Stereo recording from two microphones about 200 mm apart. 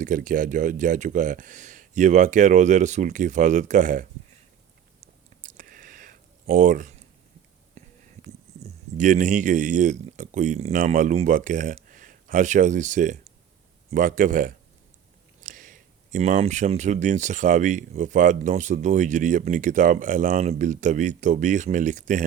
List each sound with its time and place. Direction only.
0.0 s speech: 40° right (ahead or behind)
4.9 s a sound: 40° right (ahead or behind)
7.8 s speech: 35° right (ahead or behind)